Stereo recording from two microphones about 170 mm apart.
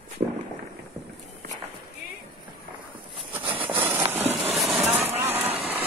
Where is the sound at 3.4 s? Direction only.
30° right (ahead or behind).